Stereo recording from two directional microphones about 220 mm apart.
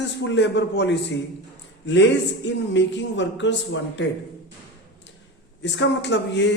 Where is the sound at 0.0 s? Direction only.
50° left (ahead or behind).